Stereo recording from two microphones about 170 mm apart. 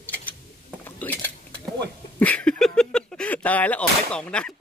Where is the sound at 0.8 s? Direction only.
10° left (ahead or behind).